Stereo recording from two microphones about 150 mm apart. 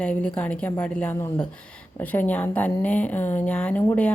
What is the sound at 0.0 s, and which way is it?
A woman's voice, 10° left (ahead or behind).